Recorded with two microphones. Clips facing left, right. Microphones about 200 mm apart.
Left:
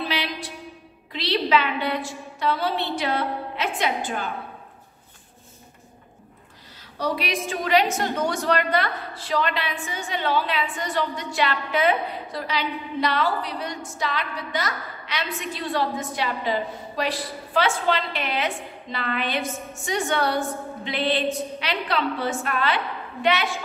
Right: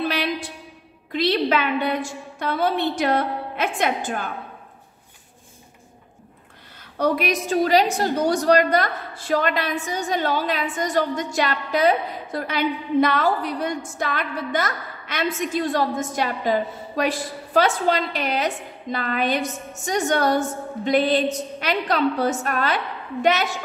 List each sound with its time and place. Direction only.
0.1 s a sound: 50° right (ahead or behind)
1.1 s a woman's voice: 50° right (ahead or behind)
6.8 s a woman's voice: 55° right (ahead or behind)
7.5 s a woman's voice: 35° right (ahead or behind)